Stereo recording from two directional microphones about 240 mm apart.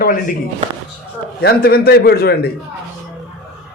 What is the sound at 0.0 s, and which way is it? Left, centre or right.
Speech, left.